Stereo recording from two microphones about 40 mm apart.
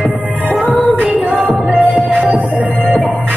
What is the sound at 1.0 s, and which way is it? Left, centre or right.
Music, right.